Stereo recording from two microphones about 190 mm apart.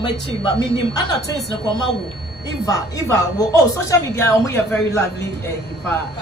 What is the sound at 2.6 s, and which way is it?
A woman's voice, 20° left (ahead or behind).